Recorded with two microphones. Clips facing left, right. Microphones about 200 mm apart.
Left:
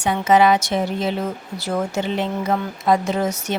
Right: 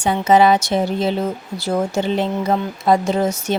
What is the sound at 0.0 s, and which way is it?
Speech, 30° right (ahead or behind).